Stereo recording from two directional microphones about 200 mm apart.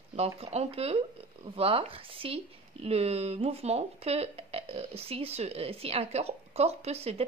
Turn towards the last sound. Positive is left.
turn(degrees=-30)  # may be behind; listen again after turning